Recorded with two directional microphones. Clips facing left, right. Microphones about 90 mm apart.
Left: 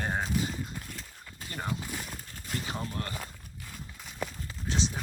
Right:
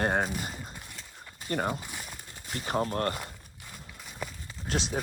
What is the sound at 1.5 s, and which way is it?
Speech, 50° right (ahead or behind).